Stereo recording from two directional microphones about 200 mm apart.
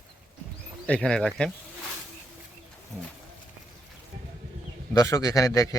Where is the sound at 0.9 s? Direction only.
5° left (ahead or behind).